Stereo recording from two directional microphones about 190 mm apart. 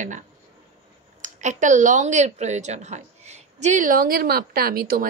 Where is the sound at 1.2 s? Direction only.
40° right (ahead or behind).